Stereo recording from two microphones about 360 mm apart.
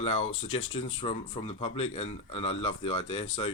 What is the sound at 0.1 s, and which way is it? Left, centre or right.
Speech, left.